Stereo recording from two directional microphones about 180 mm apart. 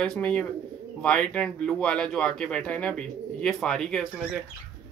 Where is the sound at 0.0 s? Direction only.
5° left (ahead or behind).